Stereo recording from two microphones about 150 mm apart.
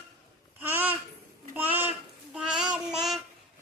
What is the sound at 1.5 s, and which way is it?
Child singing, 10° right (ahead or behind).